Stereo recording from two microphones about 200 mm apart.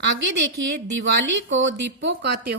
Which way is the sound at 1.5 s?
65° right (ahead or behind).